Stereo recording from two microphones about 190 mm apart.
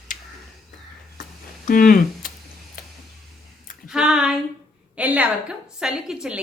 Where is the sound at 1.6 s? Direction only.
45° left (ahead or behind).